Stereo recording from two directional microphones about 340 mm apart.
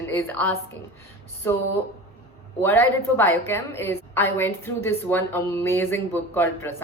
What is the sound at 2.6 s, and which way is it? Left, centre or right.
A woman's voice, centre.